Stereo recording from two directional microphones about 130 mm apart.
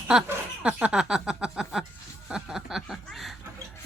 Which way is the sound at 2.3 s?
5° right (ahead or behind).